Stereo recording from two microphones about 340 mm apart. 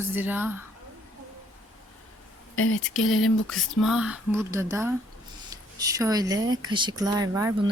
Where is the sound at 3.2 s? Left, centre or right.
Centre.